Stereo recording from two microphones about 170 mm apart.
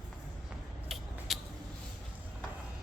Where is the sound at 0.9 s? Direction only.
Centre (ahead or behind).